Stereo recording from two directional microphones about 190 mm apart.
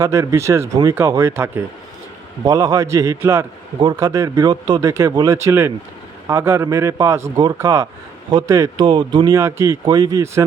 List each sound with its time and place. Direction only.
0.0 s a man's voice: 15° right (ahead or behind)